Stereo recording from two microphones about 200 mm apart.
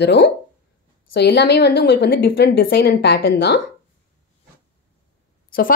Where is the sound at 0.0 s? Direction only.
60° left (ahead or behind).